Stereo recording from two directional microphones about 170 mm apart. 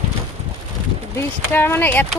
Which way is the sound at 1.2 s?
15° left (ahead or behind).